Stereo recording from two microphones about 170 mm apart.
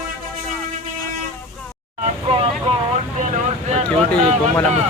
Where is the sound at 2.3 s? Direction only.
30° right (ahead or behind).